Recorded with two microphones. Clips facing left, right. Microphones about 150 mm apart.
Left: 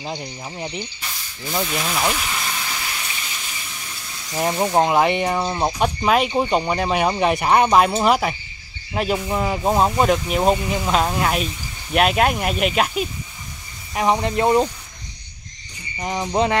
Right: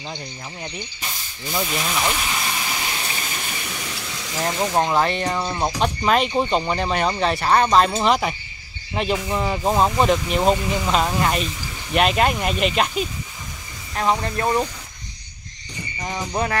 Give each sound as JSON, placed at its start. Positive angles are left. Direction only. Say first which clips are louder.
{"t": 0.0, "sound": "speech", "louder": "left 4 dB", "side_deg": 25}
{"t": 1.6, "sound": "speech", "louder": "left 1 dB", "side_deg": 0}
{"t": 2.6, "sound": "water", "louder": "right 2 dB", "side_deg": -20}
{"t": 3.6, "sound": "a sound", "louder": "right 5 dB", "side_deg": -75}
{"t": 4.4, "sound": "speech", "louder": "left 3 dB", "side_deg": 15}
{"t": 13.9, "sound": "speech", "louder": "left 3 dB", "side_deg": 15}
{"t": 16.0, "sound": "speech", "louder": "left 4 dB", "side_deg": 20}